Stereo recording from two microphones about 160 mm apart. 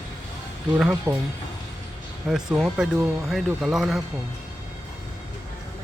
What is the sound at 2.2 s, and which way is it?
Speech, 5° right (ahead or behind).